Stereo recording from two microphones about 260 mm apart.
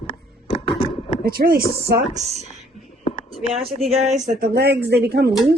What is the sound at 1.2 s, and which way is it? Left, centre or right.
Speech, right.